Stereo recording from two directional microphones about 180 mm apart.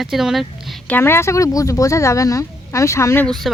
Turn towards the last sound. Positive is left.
turn(degrees=5)  # may be behind; listen again after turning